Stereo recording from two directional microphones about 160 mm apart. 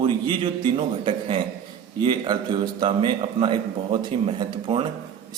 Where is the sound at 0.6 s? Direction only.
35° right (ahead or behind).